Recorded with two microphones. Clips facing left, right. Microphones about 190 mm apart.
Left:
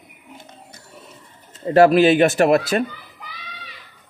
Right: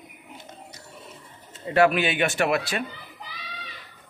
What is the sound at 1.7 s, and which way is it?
Speech, 40° left (ahead or behind).